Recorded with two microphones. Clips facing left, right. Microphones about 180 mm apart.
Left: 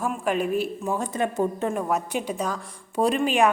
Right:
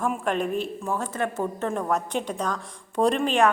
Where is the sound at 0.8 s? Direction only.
15° left (ahead or behind).